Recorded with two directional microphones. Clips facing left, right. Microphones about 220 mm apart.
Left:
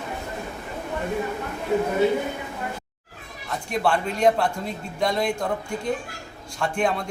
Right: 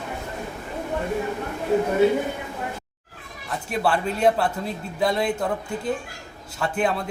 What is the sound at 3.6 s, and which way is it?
Speech, 5° right (ahead or behind).